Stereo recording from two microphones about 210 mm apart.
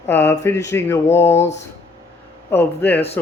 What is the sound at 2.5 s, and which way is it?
Speech, 10° left (ahead or behind).